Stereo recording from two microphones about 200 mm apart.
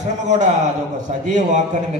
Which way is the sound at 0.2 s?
35° right (ahead or behind).